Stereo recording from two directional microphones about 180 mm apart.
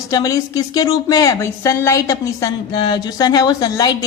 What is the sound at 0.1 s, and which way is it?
Speech, 20° left (ahead or behind).